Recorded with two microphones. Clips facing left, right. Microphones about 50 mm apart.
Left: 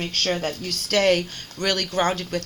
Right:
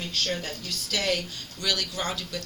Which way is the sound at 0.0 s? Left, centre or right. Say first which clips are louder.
Left 6 dB; left.